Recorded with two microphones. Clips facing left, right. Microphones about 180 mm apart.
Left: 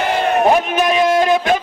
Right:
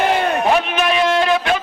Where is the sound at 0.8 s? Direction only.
15° left (ahead or behind).